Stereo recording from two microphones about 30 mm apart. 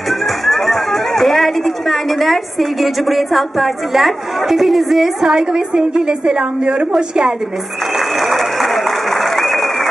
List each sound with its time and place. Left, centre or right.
0.5 s speech: centre
5.2 s a woman's voice: centre
8.5 s applause: centre